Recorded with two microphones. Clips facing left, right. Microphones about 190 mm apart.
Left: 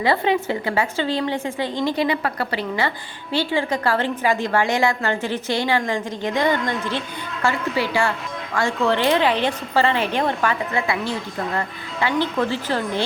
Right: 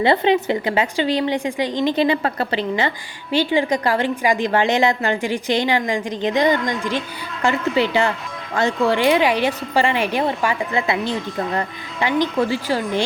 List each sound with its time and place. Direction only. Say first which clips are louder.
0.0 s a woman's voice: right 3 dB; 25° right (ahead or behind)